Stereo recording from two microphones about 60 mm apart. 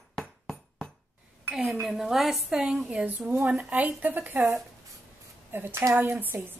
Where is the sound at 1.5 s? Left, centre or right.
Centre.